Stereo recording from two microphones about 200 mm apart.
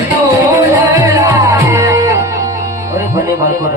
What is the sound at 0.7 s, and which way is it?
Music, 15° right (ahead or behind).